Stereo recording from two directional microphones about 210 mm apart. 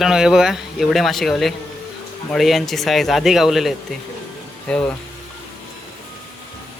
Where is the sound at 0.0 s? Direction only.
5° right (ahead or behind).